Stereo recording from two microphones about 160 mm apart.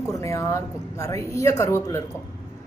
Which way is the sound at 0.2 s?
20° left (ahead or behind).